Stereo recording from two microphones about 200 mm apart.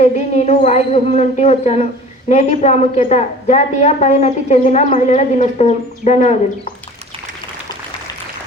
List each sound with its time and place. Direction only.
0.0 s a woman's voice: 35° left (ahead or behind)